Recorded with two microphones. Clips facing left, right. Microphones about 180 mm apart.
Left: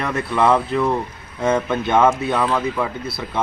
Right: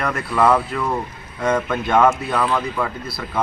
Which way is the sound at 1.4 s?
5° left (ahead or behind).